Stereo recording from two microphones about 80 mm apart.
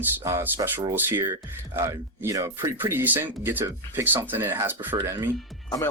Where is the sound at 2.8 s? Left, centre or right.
Right.